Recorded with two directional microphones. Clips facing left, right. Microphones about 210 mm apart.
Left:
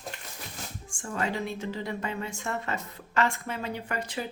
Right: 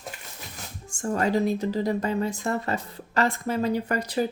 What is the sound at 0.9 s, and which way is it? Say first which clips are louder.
A woman's voice: right 8 dB; 40° right (ahead or behind).